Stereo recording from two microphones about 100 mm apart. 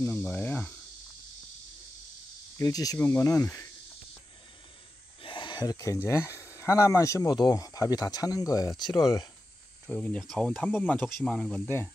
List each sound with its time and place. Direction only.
0.2 s speech: 15° left (ahead or behind)
2.5 s speech: 35° left (ahead or behind)
5.2 s a sound: 55° left (ahead or behind)
6.0 s speech: 30° left (ahead or behind)
9.8 s speech: 10° left (ahead or behind)
10.6 s speech: 15° left (ahead or behind)
11.6 s speech: 25° left (ahead or behind)